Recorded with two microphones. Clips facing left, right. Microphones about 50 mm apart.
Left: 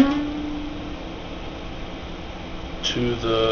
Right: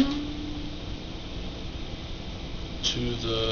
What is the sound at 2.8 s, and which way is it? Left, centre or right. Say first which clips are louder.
Speech: left 7 dB; left.